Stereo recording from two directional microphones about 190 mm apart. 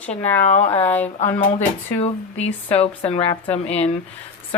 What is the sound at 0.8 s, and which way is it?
Speech, 10° left (ahead or behind).